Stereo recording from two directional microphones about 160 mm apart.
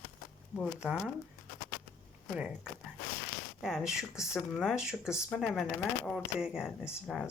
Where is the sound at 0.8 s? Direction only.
5° right (ahead or behind).